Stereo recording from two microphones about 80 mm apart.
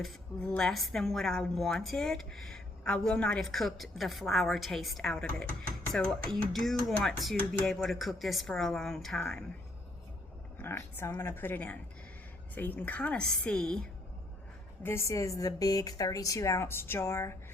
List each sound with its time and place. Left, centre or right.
0.6 s speech: centre
6.5 s speech: centre
10.6 s a woman's voice: left; by 13.7 s centre
14.8 s speech: left